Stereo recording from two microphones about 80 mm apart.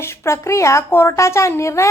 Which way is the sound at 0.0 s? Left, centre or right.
Left.